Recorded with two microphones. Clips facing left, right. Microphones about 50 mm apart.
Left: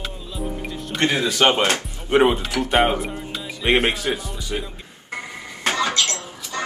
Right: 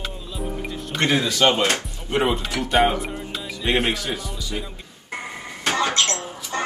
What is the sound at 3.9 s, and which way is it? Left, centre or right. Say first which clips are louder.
Speech: left 2 dB; left.